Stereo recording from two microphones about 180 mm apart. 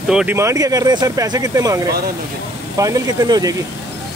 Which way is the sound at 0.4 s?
15° right (ahead or behind).